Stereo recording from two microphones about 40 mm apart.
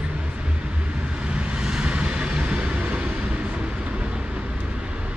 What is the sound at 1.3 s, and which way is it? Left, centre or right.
Vehicle, right.